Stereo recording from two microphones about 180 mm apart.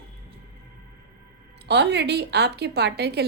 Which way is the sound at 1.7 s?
70° right (ahead or behind).